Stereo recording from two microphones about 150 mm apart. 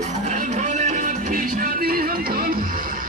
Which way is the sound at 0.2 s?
55° right (ahead or behind).